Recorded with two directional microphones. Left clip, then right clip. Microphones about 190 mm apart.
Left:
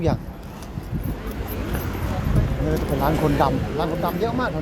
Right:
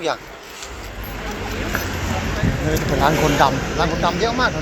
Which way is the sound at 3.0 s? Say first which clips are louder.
Right 5 dB; 20° left (ahead or behind).